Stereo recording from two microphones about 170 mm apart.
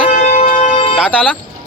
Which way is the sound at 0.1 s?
45° left (ahead or behind).